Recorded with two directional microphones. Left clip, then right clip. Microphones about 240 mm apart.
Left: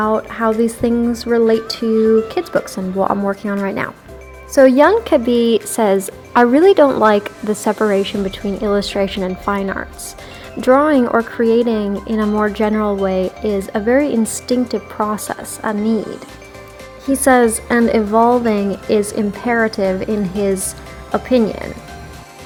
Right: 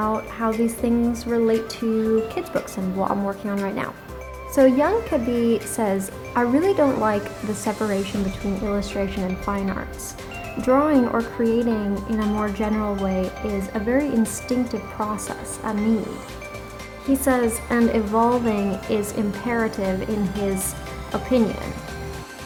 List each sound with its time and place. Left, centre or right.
0.0 s a woman's voice: left
17.1 s speech: left